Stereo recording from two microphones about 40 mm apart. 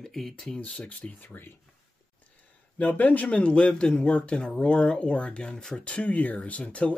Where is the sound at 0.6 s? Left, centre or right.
Left.